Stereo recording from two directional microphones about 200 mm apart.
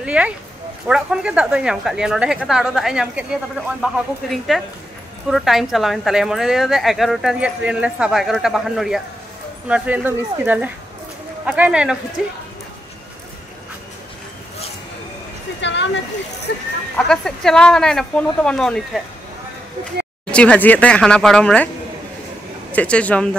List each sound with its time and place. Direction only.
0.0 s a woman's voice: 5° right (ahead or behind)
15.6 s speech: 60° left (ahead or behind)
16.9 s a woman's voice: 5° left (ahead or behind)
20.2 s a woman's voice: 5° left (ahead or behind)
22.7 s speech: 5° left (ahead or behind)